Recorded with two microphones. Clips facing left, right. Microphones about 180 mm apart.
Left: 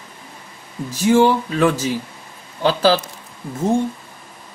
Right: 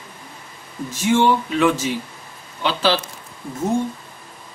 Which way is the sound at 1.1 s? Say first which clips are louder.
Left 3 dB; 35° left (ahead or behind).